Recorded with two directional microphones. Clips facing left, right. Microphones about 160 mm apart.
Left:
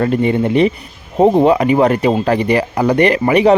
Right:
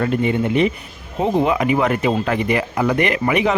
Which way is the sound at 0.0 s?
35° left (ahead or behind).